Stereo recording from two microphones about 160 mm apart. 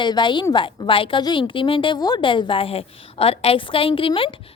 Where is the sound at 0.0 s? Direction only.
30° left (ahead or behind).